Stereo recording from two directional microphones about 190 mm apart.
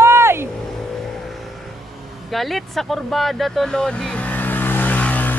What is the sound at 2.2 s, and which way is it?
Vehicle, centre (ahead or behind).